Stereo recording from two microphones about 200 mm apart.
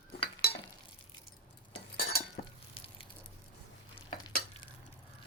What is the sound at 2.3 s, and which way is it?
Frying, 30° left (ahead or behind).